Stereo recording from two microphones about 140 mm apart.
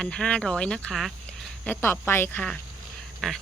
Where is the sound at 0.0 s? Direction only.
5° left (ahead or behind).